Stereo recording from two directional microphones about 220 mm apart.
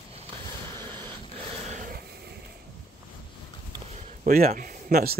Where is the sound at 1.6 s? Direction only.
35° right (ahead or behind).